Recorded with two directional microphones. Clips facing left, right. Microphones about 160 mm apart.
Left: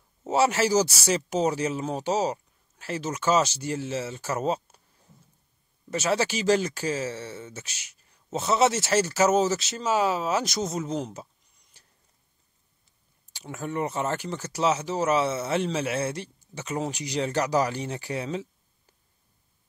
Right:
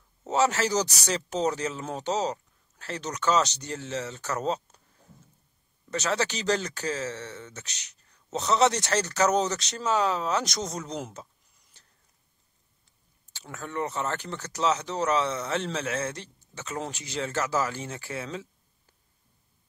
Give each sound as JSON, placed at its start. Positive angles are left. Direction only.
{"t": 0.2, "sound": "speech", "side_deg": 10}
{"t": 5.9, "sound": "speech", "side_deg": 10}
{"t": 11.7, "sound": "a sound", "side_deg": 10}
{"t": 13.7, "sound": "speech", "side_deg": 10}